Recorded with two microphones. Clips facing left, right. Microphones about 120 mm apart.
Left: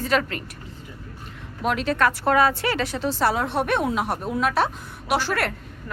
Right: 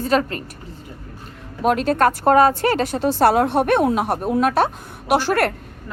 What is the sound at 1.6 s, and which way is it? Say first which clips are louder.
Speech: right 5 dB; 45° right (ahead or behind).